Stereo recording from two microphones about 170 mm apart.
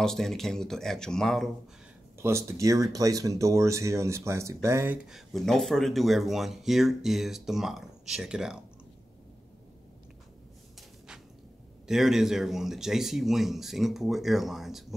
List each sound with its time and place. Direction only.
0.0 s speech: centre (ahead or behind)
2.2 s speech: 15° right (ahead or behind)
5.0 s speech: centre (ahead or behind)
11.9 s speech: centre (ahead or behind)